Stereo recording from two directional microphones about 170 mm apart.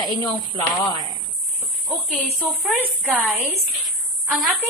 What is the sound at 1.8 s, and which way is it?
Speech, centre (ahead or behind).